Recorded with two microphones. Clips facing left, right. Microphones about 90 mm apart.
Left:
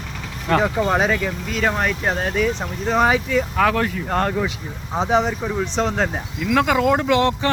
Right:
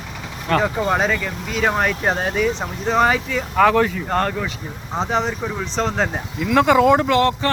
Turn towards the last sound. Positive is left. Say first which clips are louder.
# right 1 dB
turn(degrees=15)  # may be behind; listen again after turning